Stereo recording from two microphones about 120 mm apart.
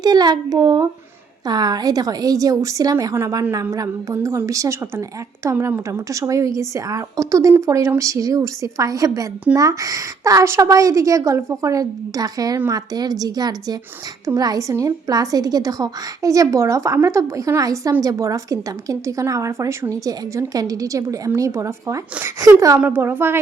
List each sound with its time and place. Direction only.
0.0 s a woman's voice: 35° right (ahead or behind)
22.8 s speech: 15° right (ahead or behind)